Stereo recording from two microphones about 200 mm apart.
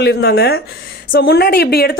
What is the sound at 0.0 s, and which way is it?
A woman's voice, 55° left (ahead or behind).